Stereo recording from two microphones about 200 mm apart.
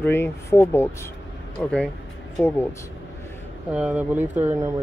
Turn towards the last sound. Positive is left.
turn(degrees=-10)  # may be behind; listen again after turning